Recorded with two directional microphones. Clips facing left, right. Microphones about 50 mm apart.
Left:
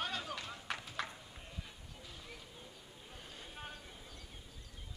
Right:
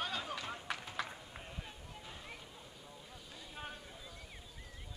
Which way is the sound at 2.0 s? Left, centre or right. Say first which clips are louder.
Right 1 dB; right.